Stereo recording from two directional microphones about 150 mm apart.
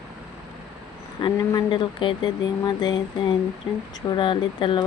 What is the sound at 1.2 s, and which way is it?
Speech, 30° left (ahead or behind).